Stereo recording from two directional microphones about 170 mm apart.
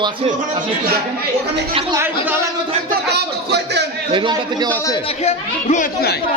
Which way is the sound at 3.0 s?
75° right (ahead or behind).